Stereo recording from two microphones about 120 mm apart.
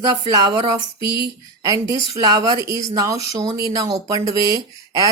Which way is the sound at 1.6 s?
30° right (ahead or behind).